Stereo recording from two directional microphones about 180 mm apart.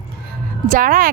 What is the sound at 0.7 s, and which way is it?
Speech, 50° right (ahead or behind).